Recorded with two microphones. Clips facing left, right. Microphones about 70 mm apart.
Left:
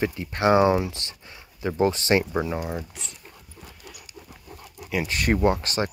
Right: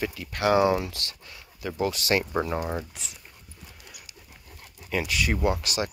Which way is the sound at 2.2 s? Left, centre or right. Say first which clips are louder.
Left 1 dB; centre.